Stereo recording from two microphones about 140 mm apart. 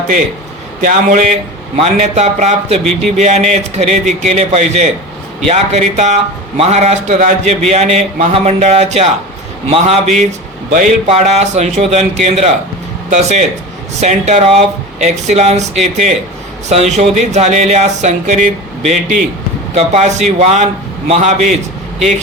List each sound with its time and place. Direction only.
0.8 s a man's voice: 65° right (ahead or behind)
7.7 s speech: 50° right (ahead or behind)
10.7 s a man's voice: 70° right (ahead or behind)
11.0 s speech: 50° right (ahead or behind)